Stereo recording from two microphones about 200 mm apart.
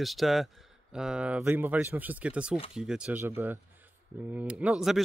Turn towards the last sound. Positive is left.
turn(degrees=-5)  # may be behind; listen again after turning